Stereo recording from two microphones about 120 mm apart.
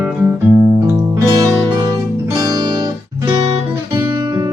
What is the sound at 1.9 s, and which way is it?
Music, 30° right (ahead or behind).